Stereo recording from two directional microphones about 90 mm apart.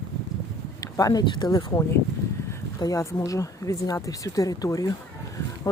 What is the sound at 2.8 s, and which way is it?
Speech, 35° left (ahead or behind).